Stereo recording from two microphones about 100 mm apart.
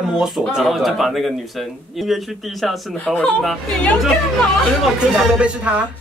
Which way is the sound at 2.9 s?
15° left (ahead or behind).